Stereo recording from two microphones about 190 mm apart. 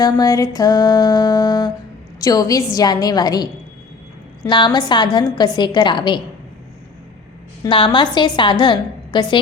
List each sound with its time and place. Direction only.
0.0 s a woman's voice: 20° left (ahead or behind)
7.6 s a woman's voice: 25° left (ahead or behind)